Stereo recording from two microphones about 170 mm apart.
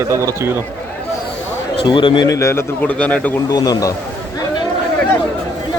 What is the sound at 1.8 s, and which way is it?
A man's voice, 30° left (ahead or behind).